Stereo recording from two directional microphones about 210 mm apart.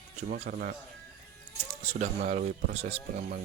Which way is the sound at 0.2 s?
35° right (ahead or behind).